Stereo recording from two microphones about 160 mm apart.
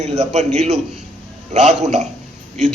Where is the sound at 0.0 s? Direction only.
45° right (ahead or behind).